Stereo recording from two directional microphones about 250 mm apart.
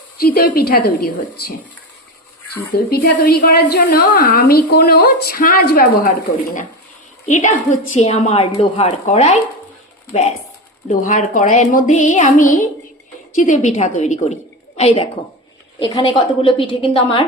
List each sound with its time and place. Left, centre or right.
0.2 s a woman's voice: left
2.7 s a woman's voice: left